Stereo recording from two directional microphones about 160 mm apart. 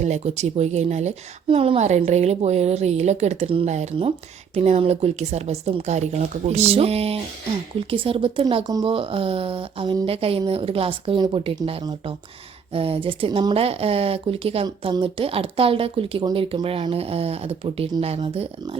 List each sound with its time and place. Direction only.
0.0 s a woman's voice: 45° right (ahead or behind)